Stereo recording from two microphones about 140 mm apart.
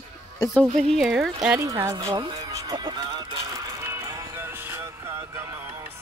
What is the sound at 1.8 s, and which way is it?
Speech, 25° right (ahead or behind).